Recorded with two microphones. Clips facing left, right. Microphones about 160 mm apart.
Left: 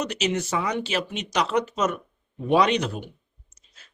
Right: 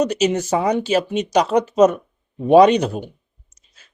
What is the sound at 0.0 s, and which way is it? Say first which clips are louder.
Speech: right 8 dB; 40° right (ahead or behind).